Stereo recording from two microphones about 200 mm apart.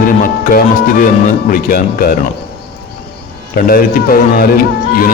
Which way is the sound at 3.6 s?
45° left (ahead or behind).